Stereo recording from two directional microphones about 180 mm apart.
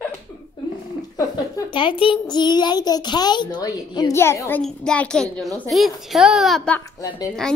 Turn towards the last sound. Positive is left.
turn(degrees=5)  # may be behind; listen again after turning